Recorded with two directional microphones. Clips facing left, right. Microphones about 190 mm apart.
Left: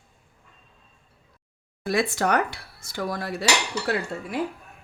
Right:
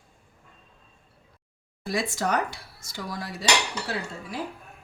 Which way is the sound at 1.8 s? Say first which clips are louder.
Left 4 dB; 60° left (ahead or behind).